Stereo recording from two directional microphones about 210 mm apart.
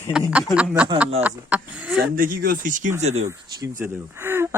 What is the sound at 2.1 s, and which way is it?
Speech, 45° right (ahead or behind).